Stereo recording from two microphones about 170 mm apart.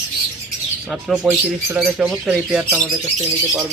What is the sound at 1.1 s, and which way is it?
Speech, 10° right (ahead or behind).